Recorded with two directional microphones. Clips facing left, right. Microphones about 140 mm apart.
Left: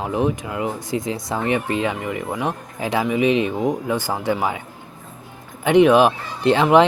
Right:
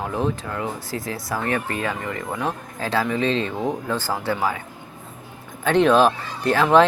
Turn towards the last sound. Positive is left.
turn(degrees=20)  # may be behind; listen again after turning